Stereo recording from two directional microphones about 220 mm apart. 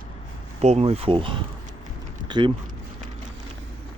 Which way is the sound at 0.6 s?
30° right (ahead or behind).